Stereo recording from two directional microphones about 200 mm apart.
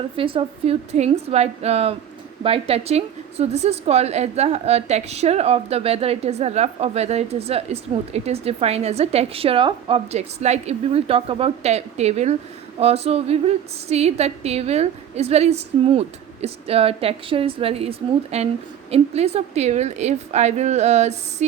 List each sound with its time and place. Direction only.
0.2 s a woman's voice: 25° right (ahead or behind)